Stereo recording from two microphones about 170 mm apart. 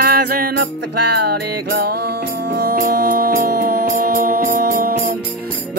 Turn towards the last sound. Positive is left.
turn(degrees=-60)  # may be behind; listen again after turning